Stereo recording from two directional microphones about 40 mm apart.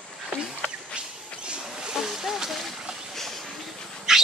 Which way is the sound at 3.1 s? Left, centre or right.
Centre.